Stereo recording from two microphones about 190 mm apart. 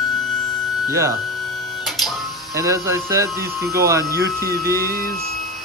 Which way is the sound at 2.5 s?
15° right (ahead or behind).